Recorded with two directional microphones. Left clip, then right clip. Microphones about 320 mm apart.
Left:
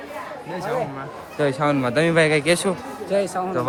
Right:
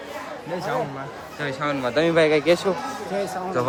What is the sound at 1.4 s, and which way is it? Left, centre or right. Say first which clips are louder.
Speech: left 5 dB; centre.